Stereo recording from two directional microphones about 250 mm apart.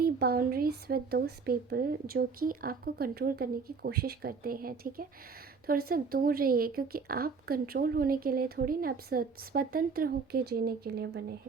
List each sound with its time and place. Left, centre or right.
0.0 s speech: right